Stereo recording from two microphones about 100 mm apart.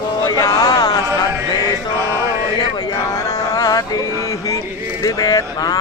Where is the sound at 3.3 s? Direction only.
40° left (ahead or behind).